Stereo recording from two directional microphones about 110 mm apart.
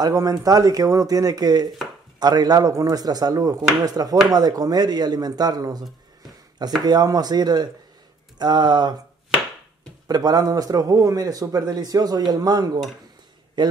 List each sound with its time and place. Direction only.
0.0 s a man's voice: 35° right (ahead or behind)
10.0 s a man's voice: 35° right (ahead or behind)